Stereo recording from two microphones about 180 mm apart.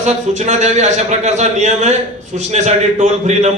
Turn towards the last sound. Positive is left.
turn(degrees=-40)  # may be behind; listen again after turning